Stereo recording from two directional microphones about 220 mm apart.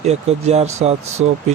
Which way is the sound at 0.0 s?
30° right (ahead or behind).